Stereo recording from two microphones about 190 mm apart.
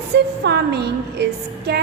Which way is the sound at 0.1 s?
60° right (ahead or behind).